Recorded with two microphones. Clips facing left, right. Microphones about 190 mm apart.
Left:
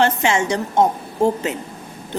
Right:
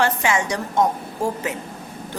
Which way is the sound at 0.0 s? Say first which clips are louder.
Left 3 dB; 25° left (ahead or behind).